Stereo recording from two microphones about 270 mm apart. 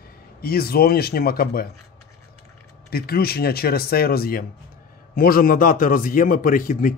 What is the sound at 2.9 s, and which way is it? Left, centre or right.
Speech, left.